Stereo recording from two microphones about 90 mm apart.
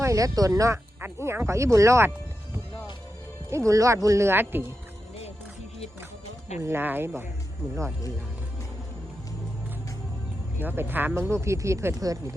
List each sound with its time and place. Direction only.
0.0 s speech: 35° right (ahead or behind)
1.0 s speech: 25° right (ahead or behind)
3.7 s speech: 35° right (ahead or behind)
6.6 s speech: 25° right (ahead or behind)
10.6 s speech: 20° right (ahead or behind); by 12.2 s 40° right (ahead or behind)